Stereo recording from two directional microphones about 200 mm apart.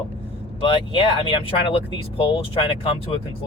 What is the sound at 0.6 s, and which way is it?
Speech, 25° left (ahead or behind).